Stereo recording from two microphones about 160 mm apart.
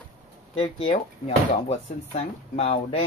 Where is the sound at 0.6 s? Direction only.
35° left (ahead or behind).